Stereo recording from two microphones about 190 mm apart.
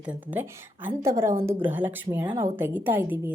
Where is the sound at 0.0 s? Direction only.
10° right (ahead or behind).